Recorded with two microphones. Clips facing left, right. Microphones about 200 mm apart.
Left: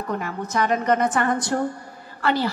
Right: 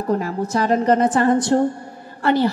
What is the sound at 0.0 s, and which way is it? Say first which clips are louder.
A woman's voice: right 7 dB; 30° right (ahead or behind).